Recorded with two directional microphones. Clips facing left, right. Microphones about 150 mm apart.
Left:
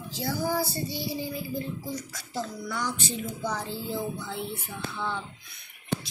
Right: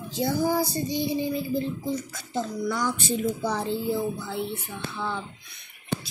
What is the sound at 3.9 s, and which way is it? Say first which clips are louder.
Speech: right 5 dB; centre (ahead or behind).